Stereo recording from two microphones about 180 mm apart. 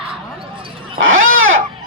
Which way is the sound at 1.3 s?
90° right.